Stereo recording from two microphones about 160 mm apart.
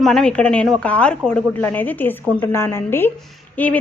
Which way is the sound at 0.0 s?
5° left (ahead or behind).